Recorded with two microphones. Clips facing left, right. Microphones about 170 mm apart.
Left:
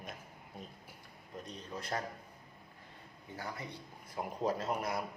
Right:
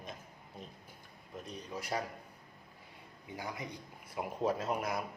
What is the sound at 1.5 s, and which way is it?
Speech, 10° right (ahead or behind).